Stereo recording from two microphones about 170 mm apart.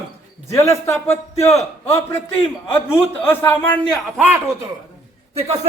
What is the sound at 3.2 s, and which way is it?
Speech, 10° left (ahead or behind).